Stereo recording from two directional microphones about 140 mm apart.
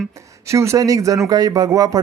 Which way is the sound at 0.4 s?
20° right (ahead or behind).